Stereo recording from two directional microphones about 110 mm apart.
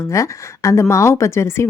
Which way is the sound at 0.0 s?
25° left (ahead or behind).